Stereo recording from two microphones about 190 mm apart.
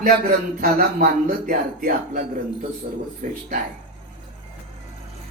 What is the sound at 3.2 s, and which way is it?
Speech, 40° right (ahead or behind).